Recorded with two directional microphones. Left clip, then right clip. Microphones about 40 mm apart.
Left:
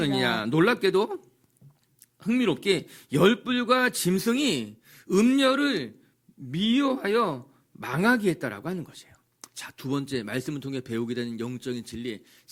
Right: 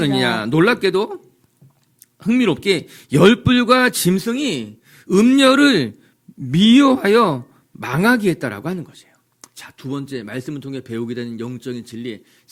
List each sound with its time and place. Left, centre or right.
0.0 s a man's voice: centre
2.1 s a man's voice: centre
3.3 s a man's voice: centre
3.7 s a man's voice: centre
4.3 s speech: left
4.9 s a sound: centre
5.5 s speech: right
6.9 s speech: centre
7.8 s a man's voice: centre
9.4 s a sound: left
9.7 s speech: left